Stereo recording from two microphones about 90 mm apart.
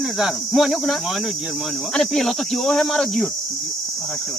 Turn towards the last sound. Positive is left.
turn(degrees=0)  # may be behind; listen again after turning